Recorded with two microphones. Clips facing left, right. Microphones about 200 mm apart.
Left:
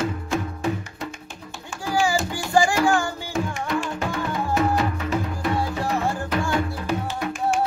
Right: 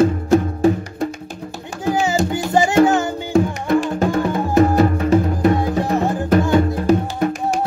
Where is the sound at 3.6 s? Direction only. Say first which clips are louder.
Right 9 dB; 40° right (ahead or behind).